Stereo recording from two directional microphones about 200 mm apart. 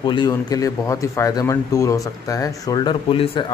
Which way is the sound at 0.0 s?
20° left (ahead or behind).